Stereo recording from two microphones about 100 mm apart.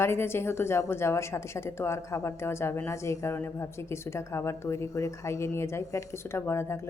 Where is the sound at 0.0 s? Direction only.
25° left (ahead or behind).